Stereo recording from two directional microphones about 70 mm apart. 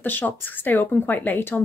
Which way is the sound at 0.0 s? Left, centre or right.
Left.